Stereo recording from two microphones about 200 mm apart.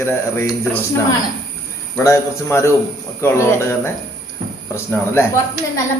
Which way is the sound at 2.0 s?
15° left (ahead or behind).